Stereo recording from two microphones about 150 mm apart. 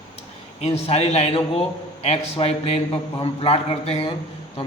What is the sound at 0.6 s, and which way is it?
A man's voice, 45° left (ahead or behind).